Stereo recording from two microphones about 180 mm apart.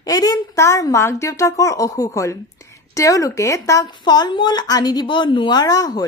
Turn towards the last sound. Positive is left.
turn(degrees=20)  # may be behind; listen again after turning